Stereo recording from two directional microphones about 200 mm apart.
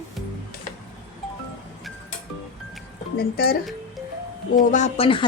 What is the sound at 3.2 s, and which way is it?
Speech, 50° left (ahead or behind).